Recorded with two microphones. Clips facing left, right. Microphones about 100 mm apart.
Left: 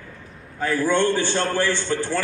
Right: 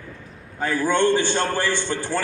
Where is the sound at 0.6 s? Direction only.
15° right (ahead or behind).